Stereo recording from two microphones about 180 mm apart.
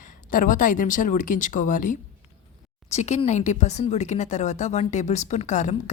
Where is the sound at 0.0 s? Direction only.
45° left (ahead or behind).